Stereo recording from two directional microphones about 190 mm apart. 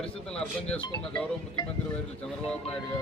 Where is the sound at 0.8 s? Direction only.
25° left (ahead or behind).